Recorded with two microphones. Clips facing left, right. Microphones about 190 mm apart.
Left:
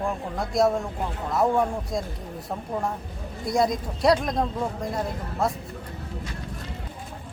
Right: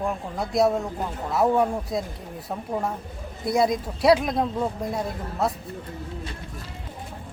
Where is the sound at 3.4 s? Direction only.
5° right (ahead or behind).